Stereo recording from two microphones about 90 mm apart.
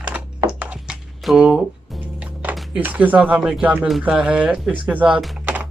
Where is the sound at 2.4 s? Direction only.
20° right (ahead or behind).